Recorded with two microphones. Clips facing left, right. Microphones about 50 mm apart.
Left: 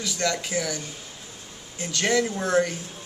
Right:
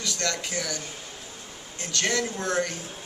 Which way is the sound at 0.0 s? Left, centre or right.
Centre.